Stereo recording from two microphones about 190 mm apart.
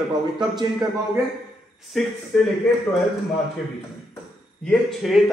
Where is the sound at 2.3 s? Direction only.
Centre (ahead or behind).